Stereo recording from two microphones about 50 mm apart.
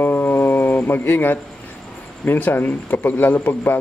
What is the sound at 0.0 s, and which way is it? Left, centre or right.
Music, left.